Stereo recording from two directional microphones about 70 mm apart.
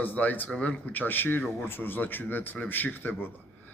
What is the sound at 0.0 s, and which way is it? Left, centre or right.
A man's voice, left.